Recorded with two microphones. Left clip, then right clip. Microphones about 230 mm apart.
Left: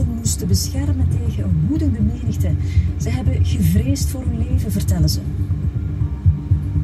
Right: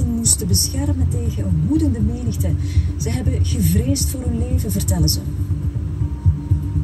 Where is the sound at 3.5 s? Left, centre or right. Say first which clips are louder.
Even; right.